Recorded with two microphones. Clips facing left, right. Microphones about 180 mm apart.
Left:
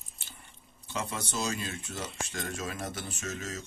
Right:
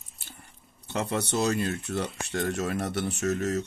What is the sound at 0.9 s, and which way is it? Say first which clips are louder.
Speech: right 7 dB; 65° right (ahead or behind).